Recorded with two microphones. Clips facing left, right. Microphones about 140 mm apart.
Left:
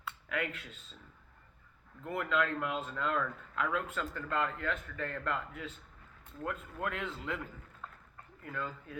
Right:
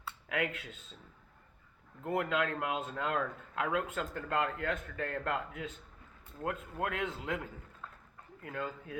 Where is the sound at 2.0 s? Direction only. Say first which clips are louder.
Right 1 dB; 20° right (ahead or behind).